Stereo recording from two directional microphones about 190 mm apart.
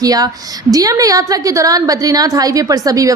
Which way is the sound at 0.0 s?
20° right (ahead or behind).